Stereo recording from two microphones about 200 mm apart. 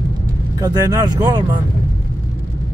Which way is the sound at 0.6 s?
15° right (ahead or behind).